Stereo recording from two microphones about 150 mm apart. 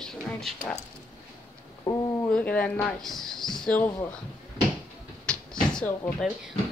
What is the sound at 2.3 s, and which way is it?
Speech, 10° left (ahead or behind).